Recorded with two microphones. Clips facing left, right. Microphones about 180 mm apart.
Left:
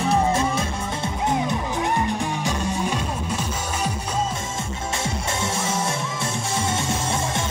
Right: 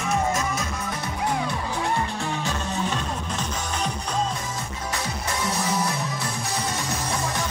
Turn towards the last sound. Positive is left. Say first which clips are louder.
# even
turn(degrees=25)  # may be behind; listen again after turning